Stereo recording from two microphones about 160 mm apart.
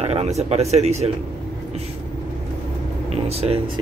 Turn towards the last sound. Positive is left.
turn(degrees=-40)  # may be behind; listen again after turning